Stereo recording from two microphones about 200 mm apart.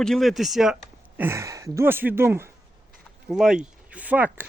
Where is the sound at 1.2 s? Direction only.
15° right (ahead or behind).